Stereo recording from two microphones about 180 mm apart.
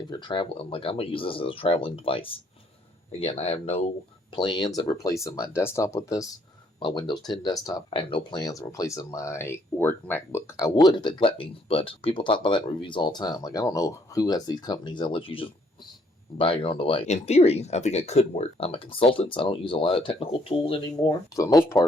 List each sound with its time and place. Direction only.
0.1 s speech: 25° left (ahead or behind)
10.8 s speech: 25° left (ahead or behind)